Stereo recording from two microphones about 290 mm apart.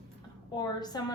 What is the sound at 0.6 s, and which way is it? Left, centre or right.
Speech, centre.